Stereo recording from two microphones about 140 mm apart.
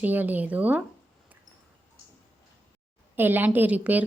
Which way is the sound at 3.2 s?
15° right (ahead or behind).